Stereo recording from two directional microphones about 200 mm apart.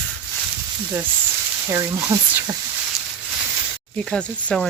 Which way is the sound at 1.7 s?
15° right (ahead or behind).